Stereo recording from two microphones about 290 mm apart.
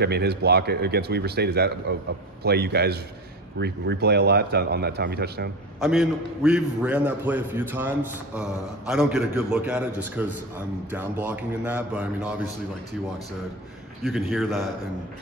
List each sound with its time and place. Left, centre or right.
0.0 s speech: right
5.8 s a man's voice: centre
14.0 s a man's voice: centre